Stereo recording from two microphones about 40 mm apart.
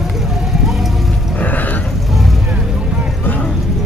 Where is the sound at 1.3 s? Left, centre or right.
Left.